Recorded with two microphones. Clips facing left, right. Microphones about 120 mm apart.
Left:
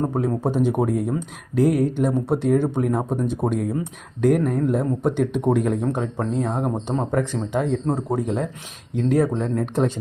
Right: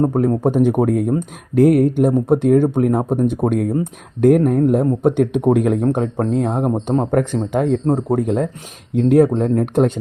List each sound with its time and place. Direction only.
0.2 s speech: 55° right (ahead or behind)